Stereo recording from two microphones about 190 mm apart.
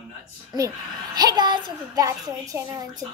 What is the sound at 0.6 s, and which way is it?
A woman's voice, 20° right (ahead or behind).